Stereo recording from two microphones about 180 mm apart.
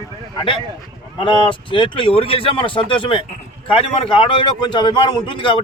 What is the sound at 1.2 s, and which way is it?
A man's voice, 25° left (ahead or behind).